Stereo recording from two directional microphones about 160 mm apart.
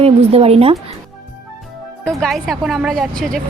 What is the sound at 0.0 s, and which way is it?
Speech, 40° right (ahead or behind).